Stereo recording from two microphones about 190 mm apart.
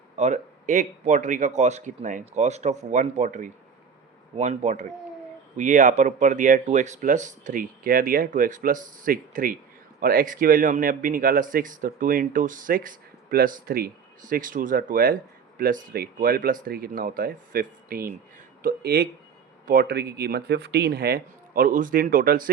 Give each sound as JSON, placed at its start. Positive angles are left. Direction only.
{"t": 0.2, "sound": "speech", "side_deg": -40}